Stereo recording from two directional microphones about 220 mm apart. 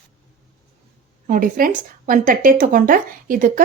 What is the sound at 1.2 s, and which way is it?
Speech, 40° right (ahead or behind).